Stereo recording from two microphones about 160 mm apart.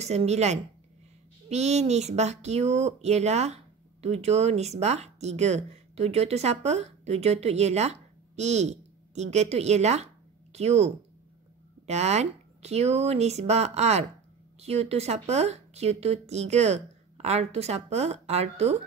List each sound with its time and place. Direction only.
0.0 s speech: 45° right (ahead or behind)